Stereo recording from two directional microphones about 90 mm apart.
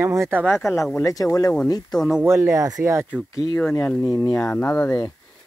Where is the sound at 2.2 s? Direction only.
30° right (ahead or behind).